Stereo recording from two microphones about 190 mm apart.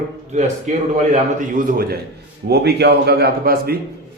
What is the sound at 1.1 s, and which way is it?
A man's voice, 45° right (ahead or behind).